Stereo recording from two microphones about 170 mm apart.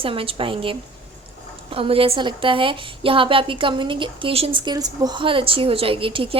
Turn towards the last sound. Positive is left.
turn(degrees=-30)  # may be behind; listen again after turning